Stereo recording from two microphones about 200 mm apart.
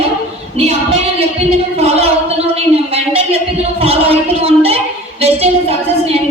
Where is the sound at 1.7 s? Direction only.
30° right (ahead or behind).